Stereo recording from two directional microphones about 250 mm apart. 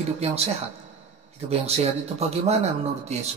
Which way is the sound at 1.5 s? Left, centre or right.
Right.